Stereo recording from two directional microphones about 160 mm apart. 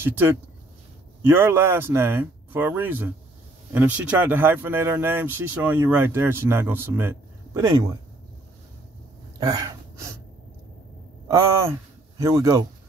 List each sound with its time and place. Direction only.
0.0 s speech: 15° right (ahead or behind)
9.4 s gasp: 25° right (ahead or behind)
11.2 s speech: 20° right (ahead or behind)